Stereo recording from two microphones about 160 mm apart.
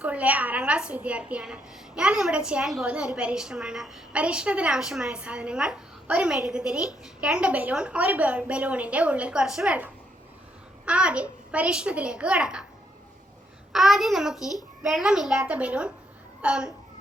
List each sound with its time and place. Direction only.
0.0 s a woman's voice: 10° right (ahead or behind)
13.7 s a child's voice: centre (ahead or behind)